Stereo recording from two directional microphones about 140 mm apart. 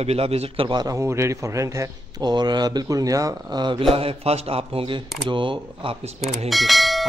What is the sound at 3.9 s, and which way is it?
A man's voice, 40° right (ahead or behind).